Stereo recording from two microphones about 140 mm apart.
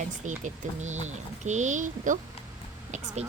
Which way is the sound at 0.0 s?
60° right (ahead or behind).